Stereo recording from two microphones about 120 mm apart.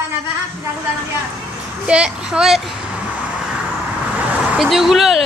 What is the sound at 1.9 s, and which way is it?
Speech, 5° right (ahead or behind).